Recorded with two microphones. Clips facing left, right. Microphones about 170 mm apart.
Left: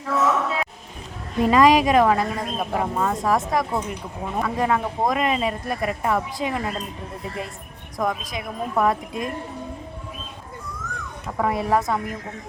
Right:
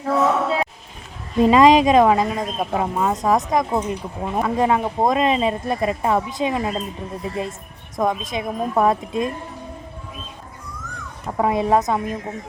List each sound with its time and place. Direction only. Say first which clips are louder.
0.0 s a sound: right 3 dB; 30° right (ahead or behind)
1.4 s a woman's voice: right 3 dB; 20° right (ahead or behind)
7.9 s a woman's voice: right 4 dB; 25° right (ahead or behind)
11.3 s a woman's voice: right 4 dB; 20° right (ahead or behind)